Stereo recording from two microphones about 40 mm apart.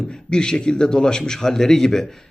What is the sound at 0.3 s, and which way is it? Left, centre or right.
Speech, centre.